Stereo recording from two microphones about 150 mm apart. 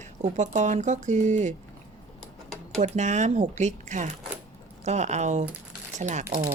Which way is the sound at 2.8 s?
50° right (ahead or behind).